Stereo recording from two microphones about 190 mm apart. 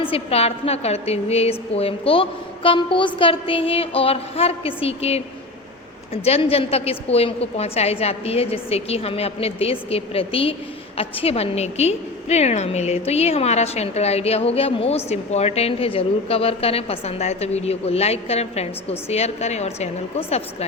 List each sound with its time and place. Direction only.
0.0 s a woman's voice: 30° left (ahead or behind)
6.2 s a woman's voice: 30° left (ahead or behind)